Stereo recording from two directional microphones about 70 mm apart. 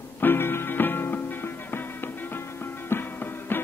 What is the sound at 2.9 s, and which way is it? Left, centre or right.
Music, left.